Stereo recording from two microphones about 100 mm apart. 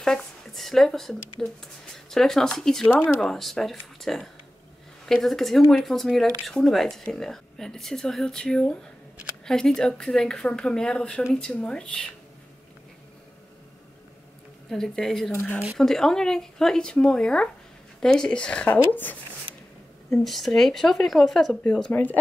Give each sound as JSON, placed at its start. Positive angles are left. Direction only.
{"t": 0.0, "sound": "speech", "side_deg": 5}
{"t": 14.7, "sound": "speech", "side_deg": 5}
{"t": 20.1, "sound": "speech", "side_deg": 0}
{"t": 21.9, "sound": "speech", "side_deg": 20}